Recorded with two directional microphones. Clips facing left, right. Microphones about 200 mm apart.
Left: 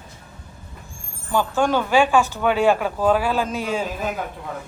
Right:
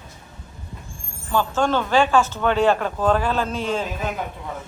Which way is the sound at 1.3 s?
15° left (ahead or behind).